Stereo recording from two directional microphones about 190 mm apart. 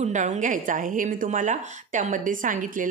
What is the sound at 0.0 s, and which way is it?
A woman's voice, 40° right (ahead or behind).